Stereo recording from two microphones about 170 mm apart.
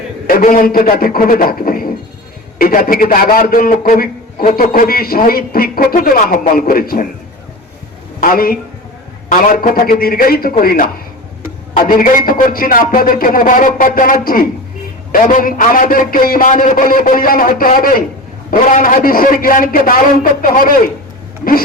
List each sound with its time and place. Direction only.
0.3 s a man's voice: 55° left (ahead or behind)
8.2 s a man's voice: 55° left (ahead or behind)